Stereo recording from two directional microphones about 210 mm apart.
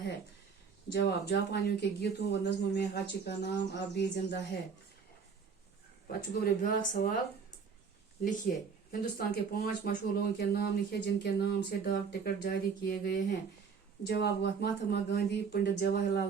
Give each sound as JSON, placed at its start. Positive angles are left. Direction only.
{"t": 0.9, "sound": "speech", "side_deg": 55}
{"t": 6.1, "sound": "speech", "side_deg": 45}
{"t": 8.5, "sound": "speech", "side_deg": 40}
{"t": 14.0, "sound": "speech", "side_deg": 50}